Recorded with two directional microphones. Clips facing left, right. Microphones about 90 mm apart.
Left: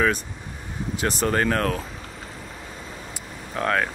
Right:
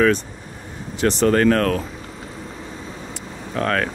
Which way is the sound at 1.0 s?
10° left (ahead or behind).